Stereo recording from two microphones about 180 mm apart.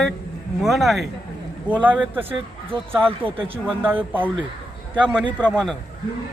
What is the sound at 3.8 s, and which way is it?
A man's voice, 10° right (ahead or behind).